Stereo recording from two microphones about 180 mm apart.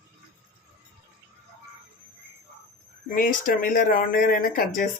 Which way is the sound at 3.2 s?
50° left (ahead or behind).